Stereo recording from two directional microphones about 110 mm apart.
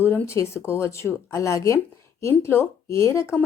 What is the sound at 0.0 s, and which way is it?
Speech, 20° left (ahead or behind).